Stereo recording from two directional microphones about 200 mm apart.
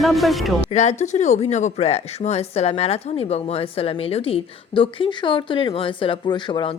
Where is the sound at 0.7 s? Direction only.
35° left (ahead or behind).